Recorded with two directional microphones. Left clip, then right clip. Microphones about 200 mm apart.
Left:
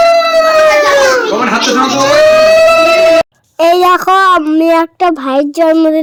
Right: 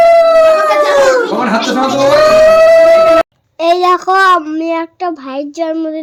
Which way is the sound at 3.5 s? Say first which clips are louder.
Left 3 dB; 35° left (ahead or behind).